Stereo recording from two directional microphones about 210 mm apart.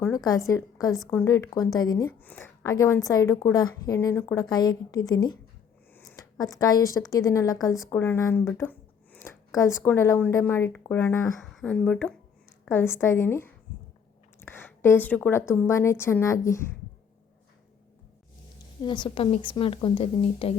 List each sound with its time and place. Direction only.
0.3 s a woman's voice: 15° left (ahead or behind)
18.8 s speech: 20° left (ahead or behind)